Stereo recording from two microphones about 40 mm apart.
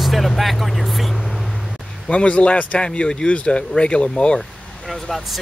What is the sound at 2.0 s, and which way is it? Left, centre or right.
Speech, left.